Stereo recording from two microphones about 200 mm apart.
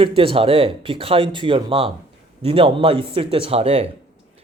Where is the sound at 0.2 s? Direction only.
25° right (ahead or behind).